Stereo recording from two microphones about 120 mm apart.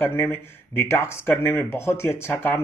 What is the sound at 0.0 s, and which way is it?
Speech, 20° left (ahead or behind).